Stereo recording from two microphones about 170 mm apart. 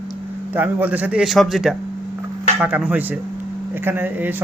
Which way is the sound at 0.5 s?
10° right (ahead or behind).